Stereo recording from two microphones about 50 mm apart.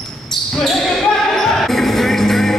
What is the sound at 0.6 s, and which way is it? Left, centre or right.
Basketball bounce, centre.